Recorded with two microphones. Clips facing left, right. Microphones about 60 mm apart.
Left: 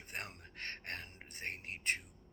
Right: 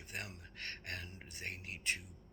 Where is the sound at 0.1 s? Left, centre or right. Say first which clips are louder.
Left 1 dB; left.